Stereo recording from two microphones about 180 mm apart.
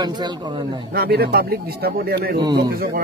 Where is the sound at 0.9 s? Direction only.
60° right (ahead or behind).